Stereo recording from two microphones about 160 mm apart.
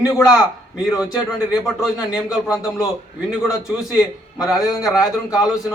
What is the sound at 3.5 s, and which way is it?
A man's voice, 5° right (ahead or behind).